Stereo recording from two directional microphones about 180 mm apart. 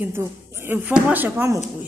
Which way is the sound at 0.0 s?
15° right (ahead or behind).